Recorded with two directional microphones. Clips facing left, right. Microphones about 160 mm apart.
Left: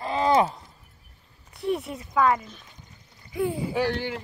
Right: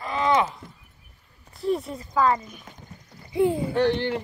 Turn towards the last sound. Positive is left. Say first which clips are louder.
# right 4 dB
turn(degrees=5)  # may be behind; listen again after turning